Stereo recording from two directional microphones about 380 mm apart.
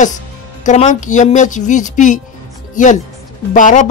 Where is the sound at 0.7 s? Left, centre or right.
Centre.